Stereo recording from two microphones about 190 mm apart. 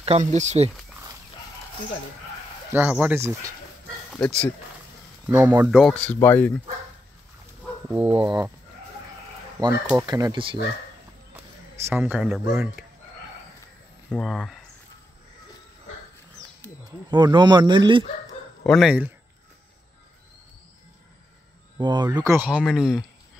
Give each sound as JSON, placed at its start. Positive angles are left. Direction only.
{"t": 0.0, "sound": "speech", "side_deg": -35}
{"t": 2.7, "sound": "speech", "side_deg": -10}
{"t": 4.1, "sound": "speech", "side_deg": 5}
{"t": 5.2, "sound": "speech", "side_deg": -5}
{"t": 5.8, "sound": "speech", "side_deg": 5}
{"t": 7.9, "sound": "speech", "side_deg": -10}
{"t": 10.0, "sound": "speech", "side_deg": -20}
{"t": 11.3, "sound": "a sound", "side_deg": -10}
{"t": 12.4, "sound": "speech", "side_deg": -10}
{"t": 14.1, "sound": "speech", "side_deg": 0}
{"t": 17.1, "sound": "speech", "side_deg": -25}
{"t": 18.6, "sound": "speech", "side_deg": 0}
{"t": 21.7, "sound": "speech", "side_deg": -20}